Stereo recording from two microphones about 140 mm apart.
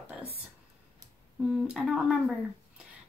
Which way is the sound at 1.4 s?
5° right (ahead or behind).